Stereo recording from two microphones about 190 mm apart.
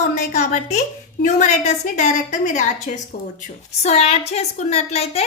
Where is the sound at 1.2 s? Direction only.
40° left (ahead or behind).